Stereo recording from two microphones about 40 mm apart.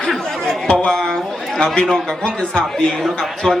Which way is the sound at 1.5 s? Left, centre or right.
Left.